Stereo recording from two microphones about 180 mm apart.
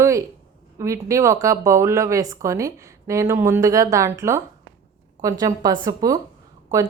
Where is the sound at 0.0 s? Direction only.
15° right (ahead or behind).